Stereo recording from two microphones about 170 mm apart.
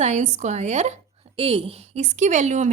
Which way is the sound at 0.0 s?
45° right (ahead or behind).